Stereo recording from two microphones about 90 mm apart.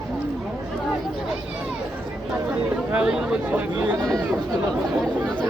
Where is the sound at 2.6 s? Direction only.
15° right (ahead or behind).